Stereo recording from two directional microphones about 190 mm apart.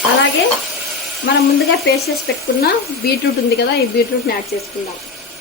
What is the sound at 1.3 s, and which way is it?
Speech, 75° left (ahead or behind).